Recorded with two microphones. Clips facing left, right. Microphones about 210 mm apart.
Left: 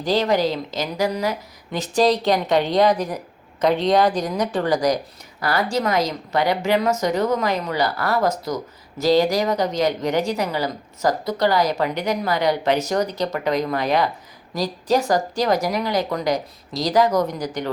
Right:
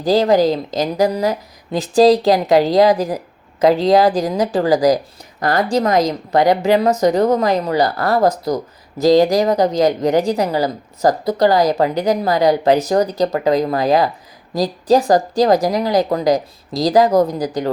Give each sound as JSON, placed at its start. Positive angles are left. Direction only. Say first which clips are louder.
{"t": 0.0, "sound": "speech", "louder": "right 6 dB", "side_deg": -35}